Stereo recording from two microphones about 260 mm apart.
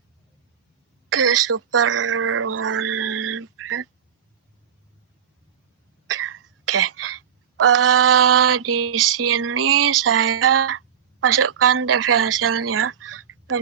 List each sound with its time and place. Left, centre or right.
1.1 s speech: right
6.1 s speech: right